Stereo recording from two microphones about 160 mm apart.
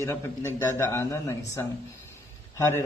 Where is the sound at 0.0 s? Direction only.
20° left (ahead or behind).